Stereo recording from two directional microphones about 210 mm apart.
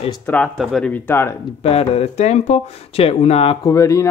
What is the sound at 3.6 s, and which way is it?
Speech, 15° left (ahead or behind).